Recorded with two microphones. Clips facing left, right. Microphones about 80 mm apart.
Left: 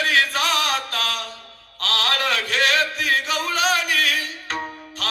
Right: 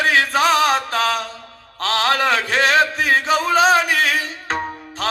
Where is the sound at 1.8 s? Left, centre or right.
Right.